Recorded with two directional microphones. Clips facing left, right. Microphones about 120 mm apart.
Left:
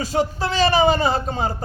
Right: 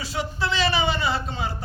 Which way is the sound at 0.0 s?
45° left (ahead or behind).